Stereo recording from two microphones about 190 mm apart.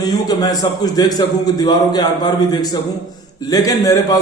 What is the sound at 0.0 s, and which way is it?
Speech, 20° left (ahead or behind).